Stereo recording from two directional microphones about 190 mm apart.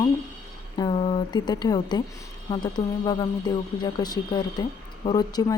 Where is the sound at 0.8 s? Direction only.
25° left (ahead or behind).